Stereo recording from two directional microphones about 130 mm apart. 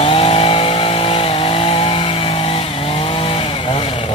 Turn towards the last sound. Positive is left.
turn(degrees=45)  # may be behind; listen again after turning